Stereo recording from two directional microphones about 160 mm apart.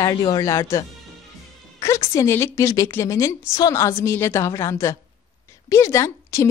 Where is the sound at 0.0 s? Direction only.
25° left (ahead or behind).